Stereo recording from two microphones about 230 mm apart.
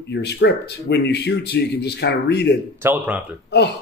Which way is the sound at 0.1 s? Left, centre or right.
Left.